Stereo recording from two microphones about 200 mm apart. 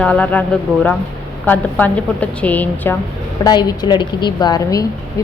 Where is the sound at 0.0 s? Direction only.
5° left (ahead or behind).